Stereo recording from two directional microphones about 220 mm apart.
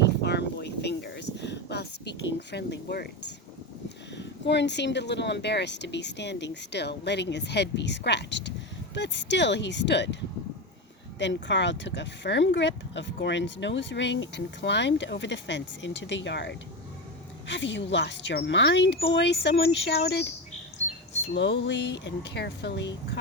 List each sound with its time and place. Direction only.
0.0 s a sound: 50° left (ahead or behind)
3.8 s speech: 50° left (ahead or behind)
11.4 s speech: 55° left (ahead or behind)
21.3 s speech: 50° left (ahead or behind)